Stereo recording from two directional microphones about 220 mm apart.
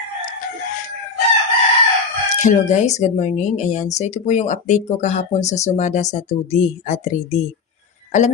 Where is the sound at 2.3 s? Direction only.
35° left (ahead or behind).